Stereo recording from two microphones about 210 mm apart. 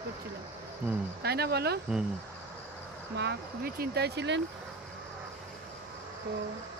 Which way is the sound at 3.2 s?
50° right (ahead or behind).